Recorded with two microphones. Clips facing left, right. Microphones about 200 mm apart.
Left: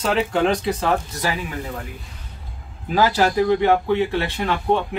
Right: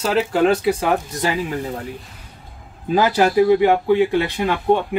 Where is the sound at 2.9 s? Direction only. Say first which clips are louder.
Right 2 dB; 15° right (ahead or behind).